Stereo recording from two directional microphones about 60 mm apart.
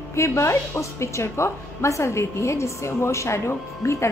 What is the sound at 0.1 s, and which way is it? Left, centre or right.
A woman's voice, left.